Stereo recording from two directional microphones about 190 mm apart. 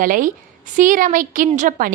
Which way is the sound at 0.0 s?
45° right (ahead or behind).